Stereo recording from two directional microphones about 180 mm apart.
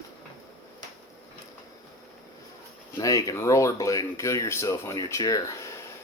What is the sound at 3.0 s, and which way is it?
Speech, 20° left (ahead or behind).